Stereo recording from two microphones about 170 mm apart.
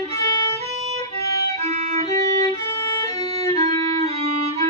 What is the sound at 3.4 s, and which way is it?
Music, 40° right (ahead or behind).